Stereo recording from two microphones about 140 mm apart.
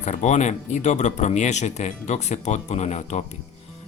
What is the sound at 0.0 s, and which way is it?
Speech, 55° left (ahead or behind).